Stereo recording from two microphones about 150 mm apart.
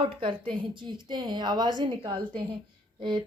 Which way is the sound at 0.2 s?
35° right (ahead or behind).